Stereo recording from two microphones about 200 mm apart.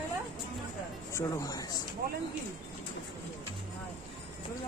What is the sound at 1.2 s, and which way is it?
Speech, 15° left (ahead or behind).